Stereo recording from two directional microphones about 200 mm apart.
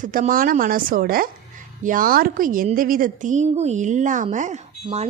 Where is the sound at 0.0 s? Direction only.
40° right (ahead or behind).